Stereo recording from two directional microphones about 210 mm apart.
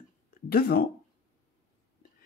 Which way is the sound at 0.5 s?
45° left (ahead or behind).